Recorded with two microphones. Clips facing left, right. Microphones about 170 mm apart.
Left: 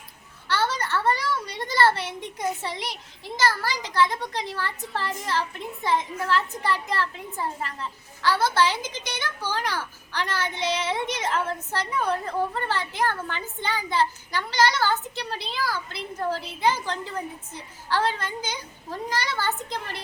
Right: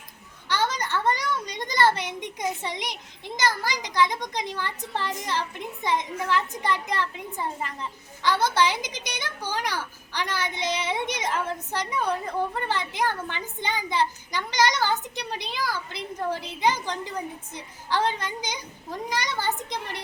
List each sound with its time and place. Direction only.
0.4 s a woman's voice: 15° right (ahead or behind)